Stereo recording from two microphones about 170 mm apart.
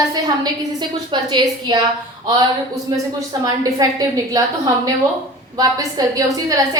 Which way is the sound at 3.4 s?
20° right (ahead or behind).